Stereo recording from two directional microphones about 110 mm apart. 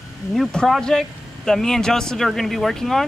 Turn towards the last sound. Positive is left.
turn(degrees=5)  # may be behind; listen again after turning